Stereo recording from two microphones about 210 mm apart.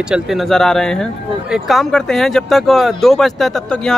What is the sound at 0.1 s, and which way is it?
Speech, centre (ahead or behind).